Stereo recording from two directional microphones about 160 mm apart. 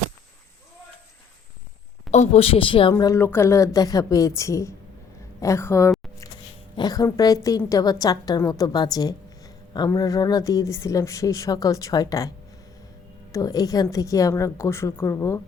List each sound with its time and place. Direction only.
2.0 s a woman's voice: 45° left (ahead or behind)
2.9 s a woman's voice: 20° left (ahead or behind)
13.3 s a woman's voice: 20° left (ahead or behind)